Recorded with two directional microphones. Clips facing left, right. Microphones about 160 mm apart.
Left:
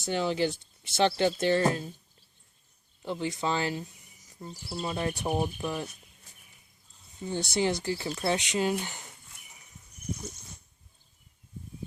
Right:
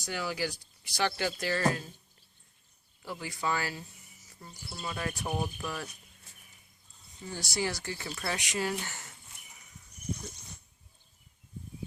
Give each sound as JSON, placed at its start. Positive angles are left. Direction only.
{"t": 0.0, "sound": "speech", "side_deg": 25}
{"t": 3.0, "sound": "speech", "side_deg": 25}
{"t": 7.3, "sound": "speech", "side_deg": 20}